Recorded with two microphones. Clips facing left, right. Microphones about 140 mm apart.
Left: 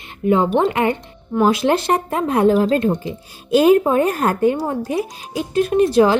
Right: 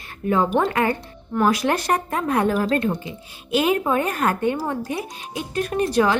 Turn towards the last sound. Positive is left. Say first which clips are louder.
# left 6 dB
turn(degrees=30)  # may be behind; listen again after turning